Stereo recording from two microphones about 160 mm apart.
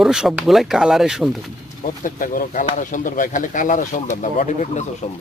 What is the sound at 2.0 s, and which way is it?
Speech, 55° left (ahead or behind).